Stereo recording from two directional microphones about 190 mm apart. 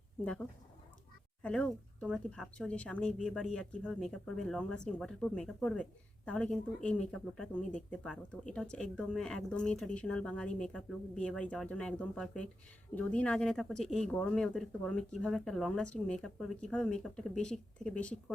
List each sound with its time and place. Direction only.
1.4 s speech: 5° left (ahead or behind)